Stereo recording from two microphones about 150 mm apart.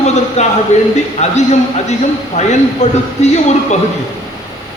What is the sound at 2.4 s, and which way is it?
Speech, 50° left (ahead or behind).